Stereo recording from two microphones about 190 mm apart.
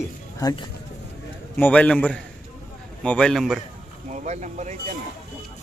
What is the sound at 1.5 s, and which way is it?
A man's voice, 10° left (ahead or behind).